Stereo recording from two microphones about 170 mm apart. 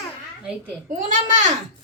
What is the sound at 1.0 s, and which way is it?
Speech, 45° right (ahead or behind).